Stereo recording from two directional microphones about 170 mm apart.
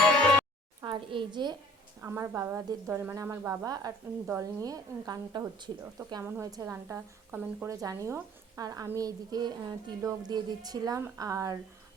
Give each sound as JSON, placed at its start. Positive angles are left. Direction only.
{"t": 0.8, "sound": "a woman's voice", "side_deg": -30}
{"t": 2.0, "sound": "a woman's voice", "side_deg": -15}